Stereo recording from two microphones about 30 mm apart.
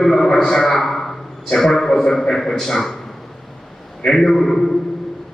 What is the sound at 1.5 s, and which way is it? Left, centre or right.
A man's voice, centre.